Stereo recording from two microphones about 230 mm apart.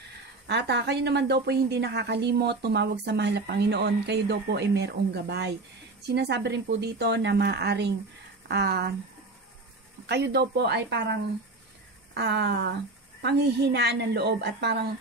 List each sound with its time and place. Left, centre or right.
0.5 s a woman's voice: right
10.0 s a woman's voice: right